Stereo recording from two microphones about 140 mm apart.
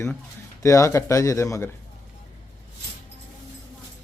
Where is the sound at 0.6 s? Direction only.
20° left (ahead or behind).